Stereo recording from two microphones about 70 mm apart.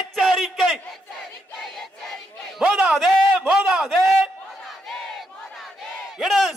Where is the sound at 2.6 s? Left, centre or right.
Centre.